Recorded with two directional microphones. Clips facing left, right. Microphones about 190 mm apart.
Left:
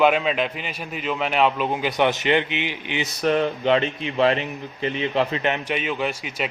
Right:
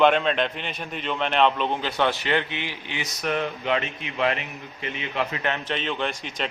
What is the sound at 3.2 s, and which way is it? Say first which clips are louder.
A man's voice: left 6 dB; 35° left (ahead or behind).